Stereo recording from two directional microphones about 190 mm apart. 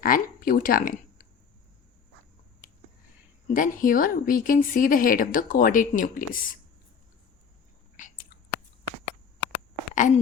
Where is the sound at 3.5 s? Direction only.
45° left (ahead or behind).